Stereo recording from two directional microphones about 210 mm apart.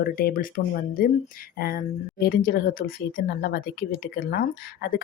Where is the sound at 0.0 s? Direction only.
45° left (ahead or behind).